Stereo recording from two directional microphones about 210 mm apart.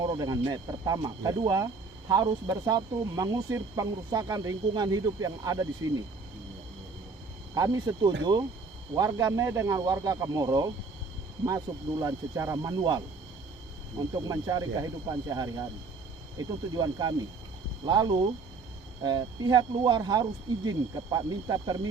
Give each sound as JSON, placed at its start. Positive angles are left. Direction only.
{"t": 0.0, "sound": "speech", "side_deg": -20}
{"t": 7.5, "sound": "speech", "side_deg": -15}
{"t": 14.1, "sound": "speech", "side_deg": -15}